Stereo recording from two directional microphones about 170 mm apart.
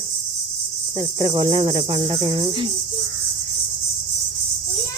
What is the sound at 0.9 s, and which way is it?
Cricket, 25° right (ahead or behind).